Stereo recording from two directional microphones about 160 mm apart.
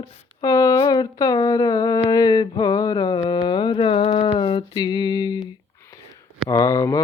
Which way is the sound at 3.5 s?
30° left (ahead or behind).